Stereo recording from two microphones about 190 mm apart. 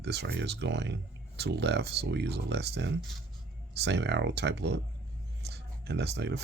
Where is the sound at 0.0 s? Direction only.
60° right (ahead or behind).